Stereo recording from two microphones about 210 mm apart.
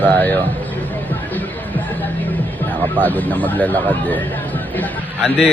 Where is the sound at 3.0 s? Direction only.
10° left (ahead or behind).